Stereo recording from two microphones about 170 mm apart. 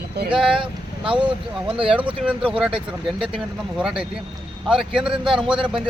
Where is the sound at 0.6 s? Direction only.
30° right (ahead or behind).